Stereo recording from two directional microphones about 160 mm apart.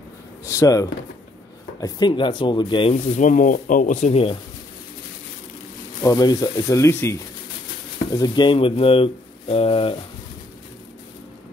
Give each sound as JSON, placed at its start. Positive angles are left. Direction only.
{"t": 0.5, "sound": "speech", "side_deg": 20}
{"t": 3.2, "sound": "speech", "side_deg": 55}
{"t": 6.0, "sound": "speech", "side_deg": 25}